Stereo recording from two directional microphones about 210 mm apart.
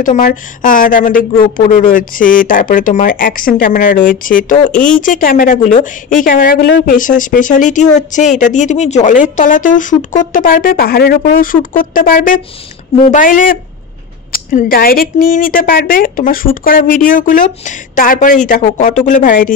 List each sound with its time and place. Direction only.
0.0 s speech: 40° left (ahead or behind)